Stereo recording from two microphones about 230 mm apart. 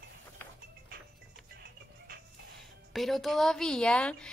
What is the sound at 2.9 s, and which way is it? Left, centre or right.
A woman's voice, centre.